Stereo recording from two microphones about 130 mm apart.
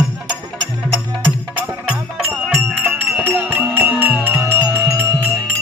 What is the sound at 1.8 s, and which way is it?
Music, 10° right (ahead or behind).